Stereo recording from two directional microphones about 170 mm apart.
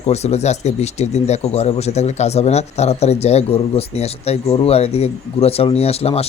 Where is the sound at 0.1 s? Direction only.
40° left (ahead or behind).